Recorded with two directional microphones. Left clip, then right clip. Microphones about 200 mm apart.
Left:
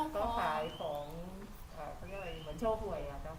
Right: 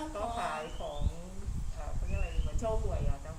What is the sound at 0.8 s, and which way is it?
Speech, 10° left (ahead or behind).